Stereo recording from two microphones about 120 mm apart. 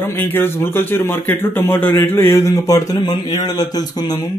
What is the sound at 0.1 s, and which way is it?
A man's voice, 15° left (ahead or behind).